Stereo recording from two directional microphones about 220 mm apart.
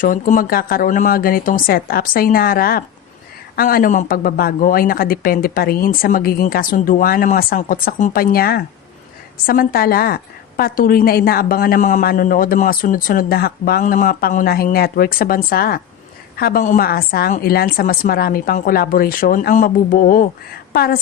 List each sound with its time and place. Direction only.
0.0 s a woman's voice: 35° left (ahead or behind)